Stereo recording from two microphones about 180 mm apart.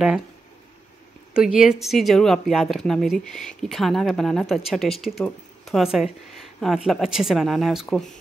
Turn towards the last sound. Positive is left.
turn(degrees=0)  # may be behind; listen again after turning